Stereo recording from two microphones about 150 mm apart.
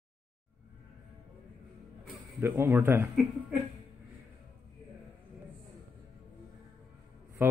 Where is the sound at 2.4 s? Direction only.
20° right (ahead or behind).